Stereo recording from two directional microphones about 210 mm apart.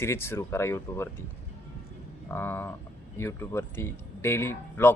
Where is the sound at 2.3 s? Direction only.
10° left (ahead or behind).